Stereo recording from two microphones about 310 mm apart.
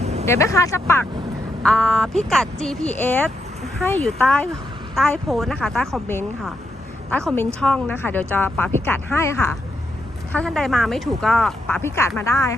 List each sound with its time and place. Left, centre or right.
0.0 s vehicle: right
0.3 s a woman's voice: centre